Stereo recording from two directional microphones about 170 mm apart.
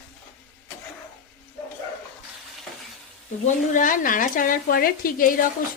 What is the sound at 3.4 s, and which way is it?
A woman's voice, 50° left (ahead or behind).